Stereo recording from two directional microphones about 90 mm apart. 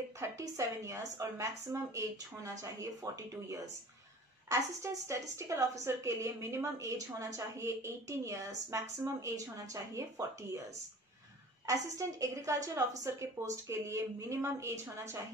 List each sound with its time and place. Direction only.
0.2 s a woman's voice: 35° right (ahead or behind)
11.6 s a woman's voice: 35° right (ahead or behind)